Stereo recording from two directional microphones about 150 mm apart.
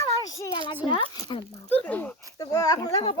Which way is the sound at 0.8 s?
35° left (ahead or behind).